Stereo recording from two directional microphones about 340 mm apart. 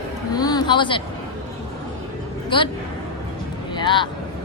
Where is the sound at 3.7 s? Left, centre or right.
Centre.